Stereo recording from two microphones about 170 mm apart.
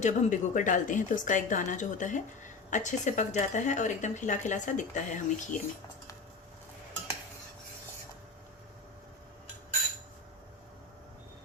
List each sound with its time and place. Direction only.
0.0 s speech: 45° left (ahead or behind)